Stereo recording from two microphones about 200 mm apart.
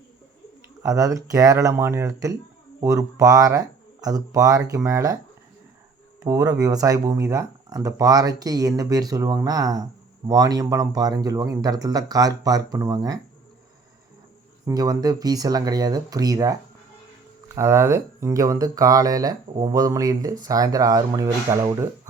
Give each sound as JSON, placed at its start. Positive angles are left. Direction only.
{"t": 0.8, "sound": "speech", "side_deg": -15}
{"t": 6.2, "sound": "speech", "side_deg": -15}
{"t": 14.7, "sound": "speech", "side_deg": -20}